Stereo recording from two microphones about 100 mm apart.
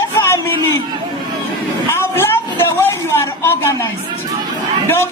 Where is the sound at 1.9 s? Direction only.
25° left (ahead or behind).